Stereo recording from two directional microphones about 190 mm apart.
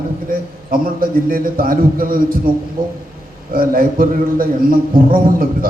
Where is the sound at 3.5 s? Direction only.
50° right (ahead or behind).